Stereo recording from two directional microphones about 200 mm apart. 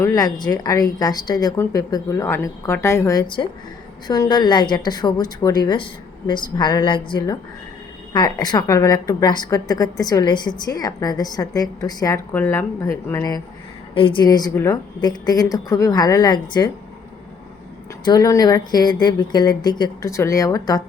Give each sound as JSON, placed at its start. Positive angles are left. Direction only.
{"t": 0.0, "sound": "a woman's voice", "side_deg": 15}
{"t": 13.9, "sound": "a woman's voice", "side_deg": 25}
{"t": 18.0, "sound": "a woman's voice", "side_deg": 20}